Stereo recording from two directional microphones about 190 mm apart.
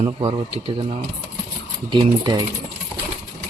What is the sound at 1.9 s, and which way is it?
Speech, 25° right (ahead or behind).